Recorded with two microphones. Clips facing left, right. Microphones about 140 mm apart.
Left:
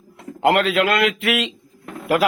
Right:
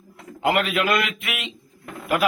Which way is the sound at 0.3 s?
65° left (ahead or behind).